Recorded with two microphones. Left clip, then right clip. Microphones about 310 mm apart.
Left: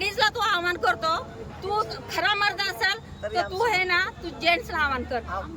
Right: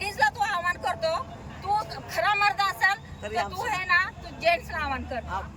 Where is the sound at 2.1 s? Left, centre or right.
Centre.